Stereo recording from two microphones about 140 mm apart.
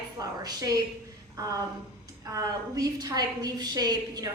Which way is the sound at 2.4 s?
25° right (ahead or behind).